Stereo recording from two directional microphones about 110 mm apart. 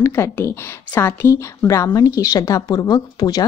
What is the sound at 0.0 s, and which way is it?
A woman's voice, 25° left (ahead or behind).